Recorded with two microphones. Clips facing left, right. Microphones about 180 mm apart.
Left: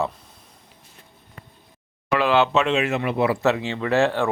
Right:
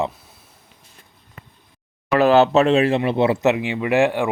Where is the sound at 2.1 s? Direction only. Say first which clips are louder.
Right 5 dB; 40° right (ahead or behind).